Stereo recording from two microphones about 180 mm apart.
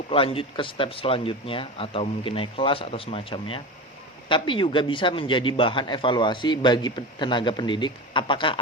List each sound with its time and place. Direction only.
0.1 s a man's voice: 30° left (ahead or behind)